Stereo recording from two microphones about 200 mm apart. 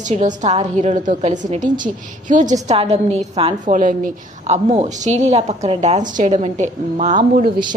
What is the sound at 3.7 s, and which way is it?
A woman's voice, 40° right (ahead or behind).